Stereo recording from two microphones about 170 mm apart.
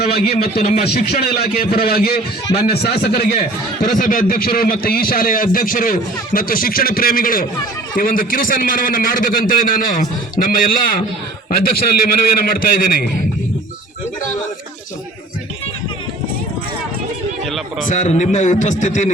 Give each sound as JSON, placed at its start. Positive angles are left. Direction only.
{"t": 0.0, "sound": "a man's voice", "side_deg": 70}
{"t": 3.9, "sound": "a man's voice", "side_deg": 55}
{"t": 17.4, "sound": "a man's voice", "side_deg": 0}
{"t": 17.8, "sound": "a man's voice", "side_deg": 45}